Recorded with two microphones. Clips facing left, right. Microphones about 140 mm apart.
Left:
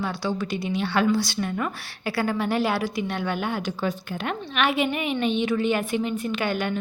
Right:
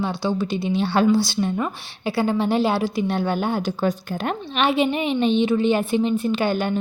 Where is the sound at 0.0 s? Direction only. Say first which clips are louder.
Right 4 dB; 25° right (ahead or behind).